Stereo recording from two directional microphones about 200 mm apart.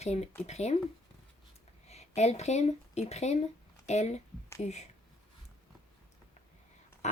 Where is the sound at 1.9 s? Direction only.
35° left (ahead or behind).